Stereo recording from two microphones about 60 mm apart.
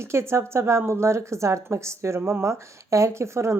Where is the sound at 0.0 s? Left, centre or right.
Right.